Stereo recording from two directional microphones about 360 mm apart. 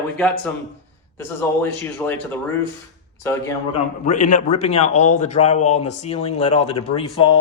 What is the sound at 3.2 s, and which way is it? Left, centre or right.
Speech, centre.